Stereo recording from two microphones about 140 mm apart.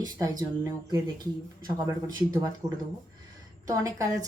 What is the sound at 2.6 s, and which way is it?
Speech, 25° right (ahead or behind).